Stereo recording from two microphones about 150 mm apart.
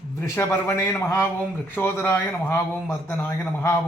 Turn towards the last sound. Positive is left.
turn(degrees=15)  # may be behind; listen again after turning